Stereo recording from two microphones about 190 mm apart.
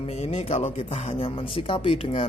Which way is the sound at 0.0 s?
30° left (ahead or behind).